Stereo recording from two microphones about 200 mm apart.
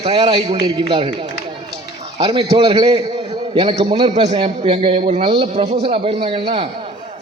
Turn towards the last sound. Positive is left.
turn(degrees=-25)  # may be behind; listen again after turning